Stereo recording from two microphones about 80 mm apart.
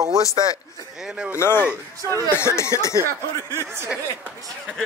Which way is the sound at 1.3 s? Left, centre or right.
Left.